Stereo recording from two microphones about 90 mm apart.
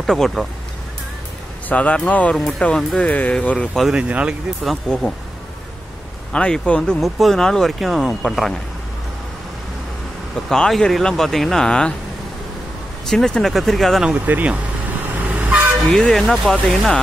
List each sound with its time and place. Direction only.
0.0 s speech: 5° left (ahead or behind)
1.7 s speech: 15° left (ahead or behind)
4.1 s speech: 15° right (ahead or behind)
4.6 s speech: 5° left (ahead or behind)
6.3 s speech: 10° left (ahead or behind)
6.8 s speech: centre (ahead or behind)
10.5 s speech: 5° left (ahead or behind)
13.1 s speech: 5° left (ahead or behind)
14.0 s speech: 15° right (ahead or behind)
15.0 s toot: 15° right (ahead or behind)
15.9 s speech: 5° left (ahead or behind)